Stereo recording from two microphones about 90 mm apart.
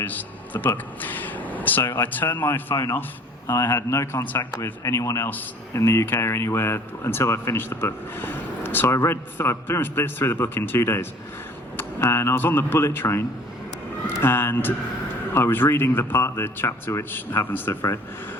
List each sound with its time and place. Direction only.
0.0 s speech: 20° left (ahead or behind)
4.6 s speech: 35° left (ahead or behind)